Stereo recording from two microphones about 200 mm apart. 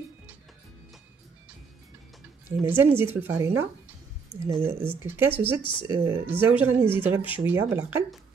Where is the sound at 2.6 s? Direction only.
10° right (ahead or behind).